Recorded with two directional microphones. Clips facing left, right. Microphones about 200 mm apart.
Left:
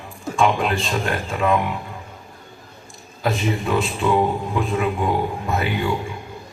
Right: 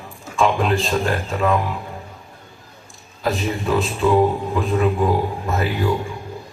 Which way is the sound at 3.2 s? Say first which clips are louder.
Even; centre (ahead or behind).